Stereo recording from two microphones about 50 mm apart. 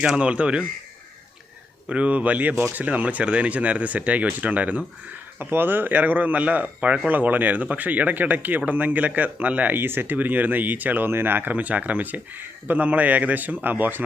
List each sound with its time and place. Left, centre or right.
0.0 s speech: centre
1.9 s speech: right
5.4 s speech: right
9.7 s speech: right